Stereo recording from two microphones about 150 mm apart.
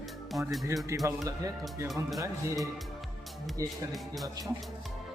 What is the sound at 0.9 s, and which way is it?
Speech, 20° right (ahead or behind).